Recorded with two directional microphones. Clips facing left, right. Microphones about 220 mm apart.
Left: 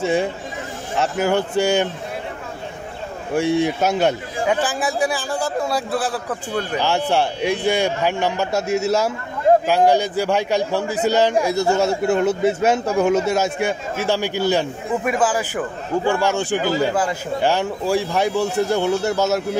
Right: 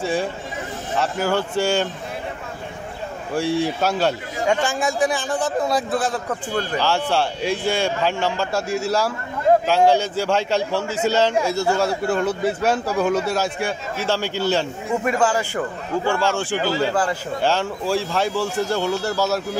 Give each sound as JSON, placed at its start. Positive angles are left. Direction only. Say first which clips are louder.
{"t": 0.0, "sound": "a man's voice", "louder": "left 3 dB", "side_deg": 20}
{"t": 3.3, "sound": "a man's voice", "louder": "left 3 dB", "side_deg": 20}
{"t": 4.5, "sound": "a man's voice", "louder": "even", "side_deg": 5}
{"t": 6.8, "sound": "a man's voice", "louder": "left 2 dB", "side_deg": 20}